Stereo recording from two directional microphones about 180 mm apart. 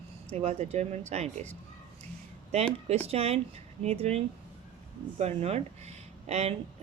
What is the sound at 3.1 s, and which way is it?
Speech, 35° right (ahead or behind).